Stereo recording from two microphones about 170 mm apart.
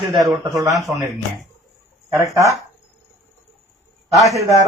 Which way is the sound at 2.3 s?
20° right (ahead or behind).